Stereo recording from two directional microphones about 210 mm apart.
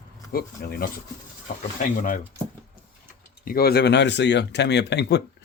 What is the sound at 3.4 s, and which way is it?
Speech, 45° left (ahead or behind).